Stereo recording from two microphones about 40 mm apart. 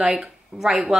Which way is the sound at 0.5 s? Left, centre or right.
Right.